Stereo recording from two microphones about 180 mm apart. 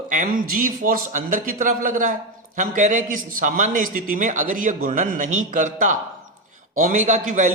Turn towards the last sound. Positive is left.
turn(degrees=-45)  # may be behind; listen again after turning